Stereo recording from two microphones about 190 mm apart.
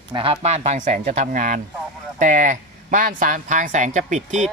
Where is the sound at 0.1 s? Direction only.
30° right (ahead or behind).